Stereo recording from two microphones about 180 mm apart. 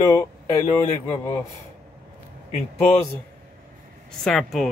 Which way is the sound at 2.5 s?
35° left (ahead or behind).